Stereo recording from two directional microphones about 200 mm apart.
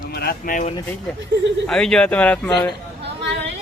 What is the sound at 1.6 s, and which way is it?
Speech, 5° left (ahead or behind).